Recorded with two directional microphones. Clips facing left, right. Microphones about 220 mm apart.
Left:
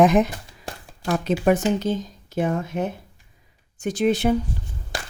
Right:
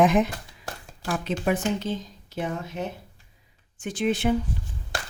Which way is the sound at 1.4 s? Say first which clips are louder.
Left 6 dB; 45° left (ahead or behind).